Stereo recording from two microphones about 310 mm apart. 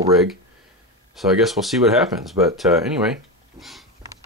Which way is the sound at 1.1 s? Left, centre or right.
Centre.